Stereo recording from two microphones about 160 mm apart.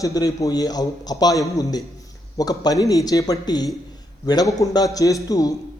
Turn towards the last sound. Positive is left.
turn(degrees=20)  # may be behind; listen again after turning